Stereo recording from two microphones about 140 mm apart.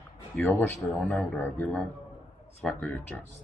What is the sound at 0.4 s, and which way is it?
Speech, 15° left (ahead or behind).